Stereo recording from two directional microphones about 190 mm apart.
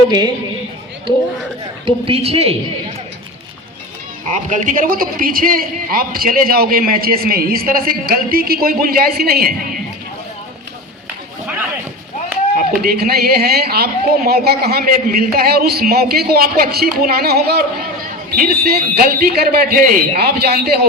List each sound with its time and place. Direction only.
2.0 s a man's voice: 30° right (ahead or behind)
4.3 s a man's voice: 40° right (ahead or behind)
12.5 s a man's voice: 55° right (ahead or behind)